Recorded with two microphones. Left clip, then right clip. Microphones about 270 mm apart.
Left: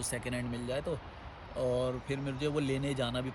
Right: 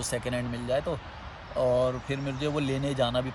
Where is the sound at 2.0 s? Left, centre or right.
Centre.